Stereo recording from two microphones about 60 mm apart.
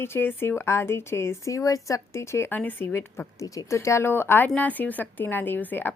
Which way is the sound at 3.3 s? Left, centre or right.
Left.